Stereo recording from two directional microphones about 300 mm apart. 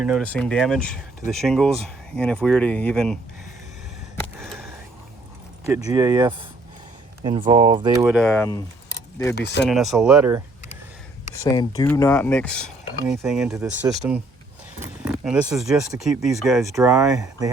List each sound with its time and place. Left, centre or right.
0.0 s speech: centre
5.6 s speech: centre
9.3 s speech: left
9.6 s speech: centre
11.3 s speech: centre